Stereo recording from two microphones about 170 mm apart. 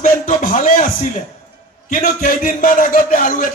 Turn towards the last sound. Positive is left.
turn(degrees=50)  # may be behind; listen again after turning